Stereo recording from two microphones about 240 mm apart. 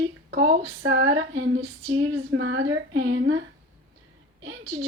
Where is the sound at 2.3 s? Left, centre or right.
Right.